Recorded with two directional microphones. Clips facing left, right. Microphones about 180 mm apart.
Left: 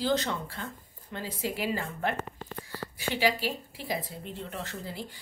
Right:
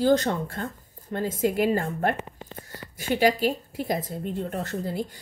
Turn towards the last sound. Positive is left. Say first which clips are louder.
# right 8 dB
turn(degrees=-45)  # may be behind; listen again after turning